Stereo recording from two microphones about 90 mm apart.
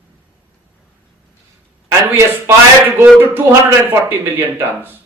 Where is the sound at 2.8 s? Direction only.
20° right (ahead or behind).